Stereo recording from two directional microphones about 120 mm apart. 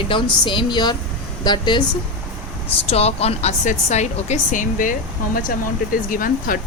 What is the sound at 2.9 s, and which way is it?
Speech, 60° left (ahead or behind).